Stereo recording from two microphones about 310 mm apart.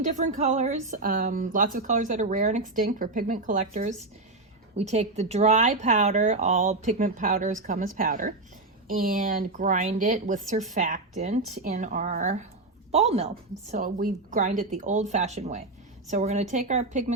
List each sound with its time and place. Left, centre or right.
0.0 s a woman's voice: right